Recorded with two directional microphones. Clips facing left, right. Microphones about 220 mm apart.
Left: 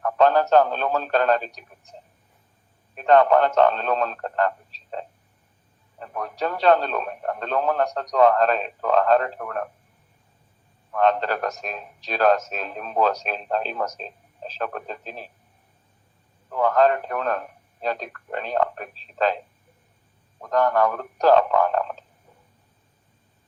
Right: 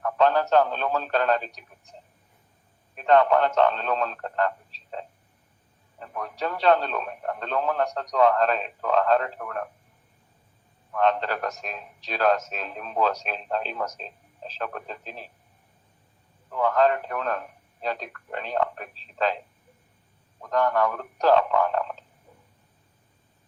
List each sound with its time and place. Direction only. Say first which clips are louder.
0.0 s a man's voice: left 3 dB; 45° left (ahead or behind)
2.9 s a man's voice: left 3 dB; 45° left (ahead or behind)
10.9 s a man's voice: left 3 dB; 45° left (ahead or behind)
16.5 s a man's voice: left 3 dB; 45° left (ahead or behind)
20.4 s a man's voice: left 3 dB; 45° left (ahead or behind)